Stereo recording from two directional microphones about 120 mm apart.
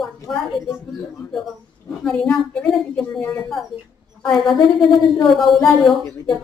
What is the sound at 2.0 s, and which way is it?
A woman's voice, 5° left (ahead or behind).